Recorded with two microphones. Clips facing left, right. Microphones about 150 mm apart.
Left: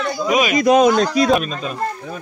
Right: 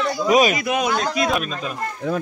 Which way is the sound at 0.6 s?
40° left (ahead or behind).